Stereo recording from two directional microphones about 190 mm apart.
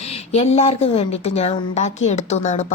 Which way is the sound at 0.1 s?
35° left (ahead or behind).